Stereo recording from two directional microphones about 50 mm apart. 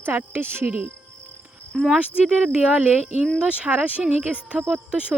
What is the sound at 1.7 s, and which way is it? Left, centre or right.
Speech, centre.